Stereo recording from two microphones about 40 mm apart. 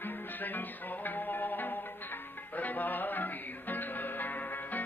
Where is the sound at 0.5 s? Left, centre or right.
Left.